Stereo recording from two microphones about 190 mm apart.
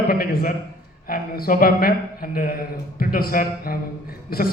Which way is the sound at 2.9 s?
50° left (ahead or behind).